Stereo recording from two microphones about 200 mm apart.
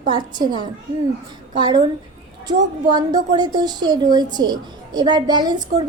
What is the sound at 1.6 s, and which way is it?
A woman's voice, 20° right (ahead or behind).